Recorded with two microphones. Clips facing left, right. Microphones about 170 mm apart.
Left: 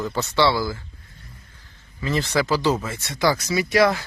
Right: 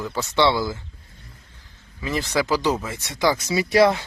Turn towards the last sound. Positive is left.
turn(degrees=-30)  # may be behind; listen again after turning